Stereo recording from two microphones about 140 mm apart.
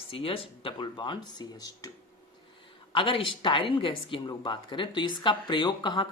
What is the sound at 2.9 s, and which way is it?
Speech, 35° left (ahead or behind).